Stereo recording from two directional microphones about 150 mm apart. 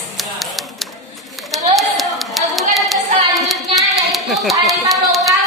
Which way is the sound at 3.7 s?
Centre (ahead or behind).